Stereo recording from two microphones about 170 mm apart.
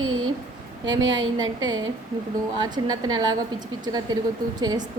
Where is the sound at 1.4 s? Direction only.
20° right (ahead or behind).